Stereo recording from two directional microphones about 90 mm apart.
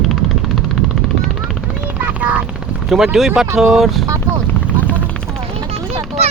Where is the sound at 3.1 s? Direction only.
Centre (ahead or behind).